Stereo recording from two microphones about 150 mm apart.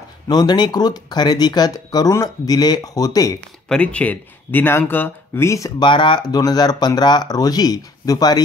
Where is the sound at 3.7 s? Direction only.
10° left (ahead or behind).